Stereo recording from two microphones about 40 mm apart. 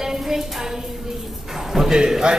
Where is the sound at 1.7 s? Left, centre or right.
Centre.